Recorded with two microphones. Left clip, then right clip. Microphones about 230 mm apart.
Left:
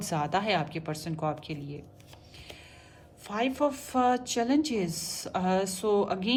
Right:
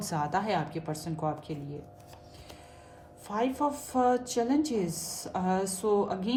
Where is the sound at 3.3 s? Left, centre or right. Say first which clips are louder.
Left 1 dB; left.